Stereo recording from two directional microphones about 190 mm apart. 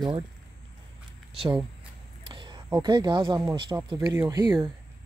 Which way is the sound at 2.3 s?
25° right (ahead or behind).